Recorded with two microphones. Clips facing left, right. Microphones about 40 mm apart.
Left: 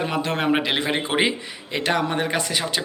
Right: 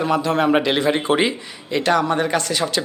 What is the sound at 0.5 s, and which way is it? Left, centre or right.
Speech, centre.